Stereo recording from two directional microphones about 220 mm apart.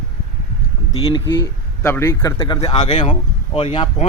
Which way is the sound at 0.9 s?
15° left (ahead or behind).